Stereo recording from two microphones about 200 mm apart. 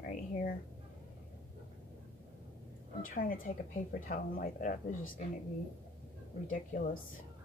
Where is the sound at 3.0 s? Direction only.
45° left (ahead or behind).